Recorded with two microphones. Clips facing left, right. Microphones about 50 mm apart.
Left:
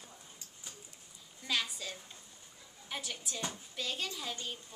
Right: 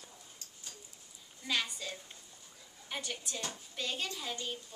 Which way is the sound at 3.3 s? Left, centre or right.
Centre.